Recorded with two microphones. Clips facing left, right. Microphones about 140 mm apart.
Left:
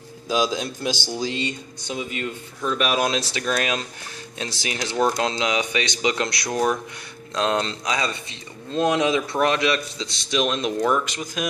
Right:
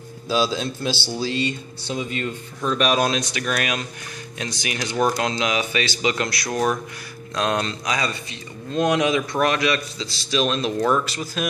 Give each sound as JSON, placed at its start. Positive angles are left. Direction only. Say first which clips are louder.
{"t": 0.3, "sound": "speech", "louder": "right 1 dB", "side_deg": 15}
{"t": 3.1, "sound": "a man's voice", "louder": "even", "side_deg": 30}